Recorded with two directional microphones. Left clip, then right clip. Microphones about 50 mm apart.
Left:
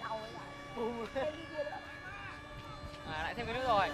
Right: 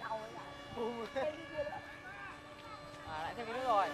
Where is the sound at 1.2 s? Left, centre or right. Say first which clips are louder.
Left 1 dB; right.